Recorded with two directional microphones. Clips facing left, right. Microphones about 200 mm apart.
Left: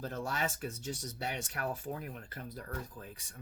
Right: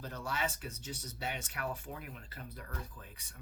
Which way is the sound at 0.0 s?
45° left (ahead or behind).